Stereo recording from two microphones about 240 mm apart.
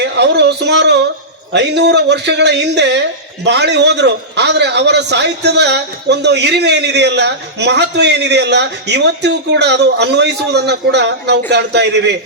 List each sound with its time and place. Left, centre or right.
0.0 s a man's voice: right